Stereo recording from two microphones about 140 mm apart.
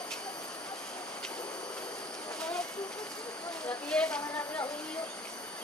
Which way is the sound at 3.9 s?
5° left (ahead or behind).